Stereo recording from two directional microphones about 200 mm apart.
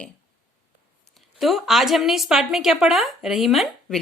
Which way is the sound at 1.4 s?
Centre (ahead or behind).